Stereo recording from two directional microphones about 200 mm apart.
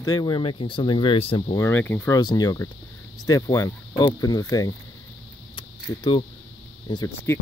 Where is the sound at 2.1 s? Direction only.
20° left (ahead or behind).